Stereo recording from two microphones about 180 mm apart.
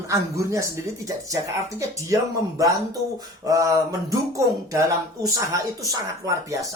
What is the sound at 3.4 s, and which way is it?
Speech, 20° right (ahead or behind).